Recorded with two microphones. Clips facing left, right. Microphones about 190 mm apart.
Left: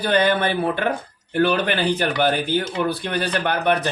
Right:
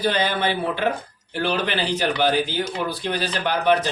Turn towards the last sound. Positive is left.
turn(degrees=60)  # may be behind; listen again after turning